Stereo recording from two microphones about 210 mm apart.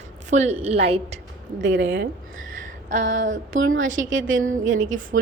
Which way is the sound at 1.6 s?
60° right (ahead or behind).